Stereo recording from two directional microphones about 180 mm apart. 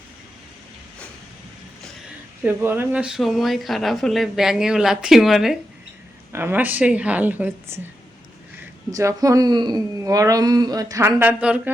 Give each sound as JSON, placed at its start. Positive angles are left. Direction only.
{"t": 2.4, "sound": "a woman's voice", "side_deg": -10}
{"t": 8.9, "sound": "speech", "side_deg": -20}